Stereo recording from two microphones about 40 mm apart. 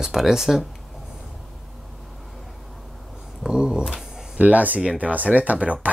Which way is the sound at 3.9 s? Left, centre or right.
Centre.